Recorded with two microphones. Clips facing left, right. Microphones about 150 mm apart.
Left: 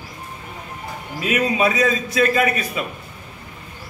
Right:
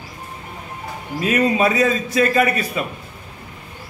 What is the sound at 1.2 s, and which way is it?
A man's voice, 30° right (ahead or behind).